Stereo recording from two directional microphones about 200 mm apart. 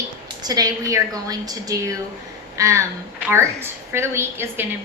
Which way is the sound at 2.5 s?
15° right (ahead or behind).